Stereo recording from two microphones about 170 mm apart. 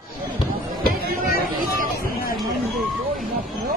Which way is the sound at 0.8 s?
60° left (ahead or behind).